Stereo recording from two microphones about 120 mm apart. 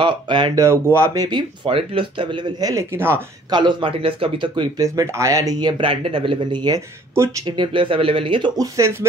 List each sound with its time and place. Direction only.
0.0 s speech: 40° right (ahead or behind)
0.6 s speech: 20° right (ahead or behind); by 2.7 s 40° right (ahead or behind)
2.7 s speech: 20° right (ahead or behind)
3.4 s speech: 40° right (ahead or behind)
4.8 s speech: 25° right (ahead or behind); by 8.5 s 45° right (ahead or behind)
8.5 s speech: 25° right (ahead or behind)